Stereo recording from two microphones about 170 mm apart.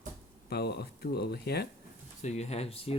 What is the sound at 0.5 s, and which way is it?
Speech, 70° left (ahead or behind).